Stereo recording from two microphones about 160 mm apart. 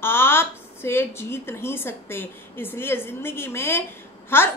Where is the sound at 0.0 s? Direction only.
15° left (ahead or behind).